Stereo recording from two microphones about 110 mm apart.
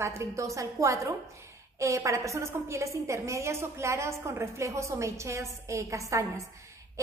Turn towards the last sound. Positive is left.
turn(degrees=-30)  # may be behind; listen again after turning